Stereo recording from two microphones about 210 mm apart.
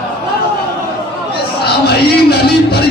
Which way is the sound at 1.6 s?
50° left (ahead or behind).